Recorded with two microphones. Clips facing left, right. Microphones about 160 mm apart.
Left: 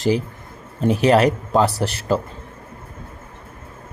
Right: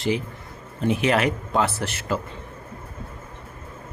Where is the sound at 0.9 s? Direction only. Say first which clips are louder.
Left 6 dB; 35° left (ahead or behind).